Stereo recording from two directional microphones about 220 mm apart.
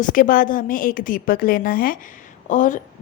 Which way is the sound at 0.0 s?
40° left (ahead or behind).